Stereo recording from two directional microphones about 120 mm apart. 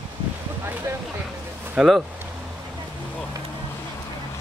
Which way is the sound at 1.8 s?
Centre (ahead or behind).